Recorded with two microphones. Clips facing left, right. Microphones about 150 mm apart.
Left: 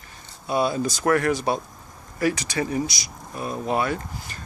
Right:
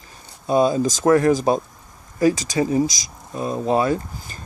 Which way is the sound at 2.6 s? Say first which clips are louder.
Right 6 dB; 25° right (ahead or behind).